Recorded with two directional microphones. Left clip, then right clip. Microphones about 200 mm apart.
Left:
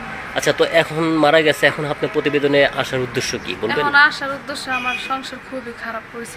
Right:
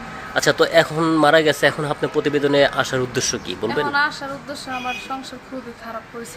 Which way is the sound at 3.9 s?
Centre (ahead or behind).